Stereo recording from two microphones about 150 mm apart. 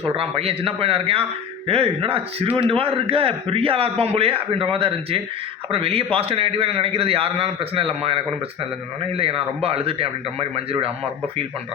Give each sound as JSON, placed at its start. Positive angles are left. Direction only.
{"t": 0.1, "sound": "a man's voice", "side_deg": -40}